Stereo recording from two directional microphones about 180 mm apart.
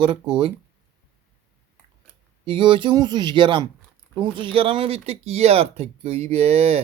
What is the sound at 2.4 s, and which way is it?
Speech, 30° right (ahead or behind).